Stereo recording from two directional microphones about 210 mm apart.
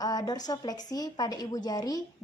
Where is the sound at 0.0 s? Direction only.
20° left (ahead or behind).